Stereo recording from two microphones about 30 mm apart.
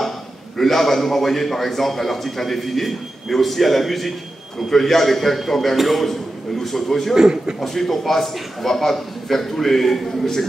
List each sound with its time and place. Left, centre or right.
0.6 s a man's voice: centre
7.2 s a man's voice: right
7.6 s a man's voice: centre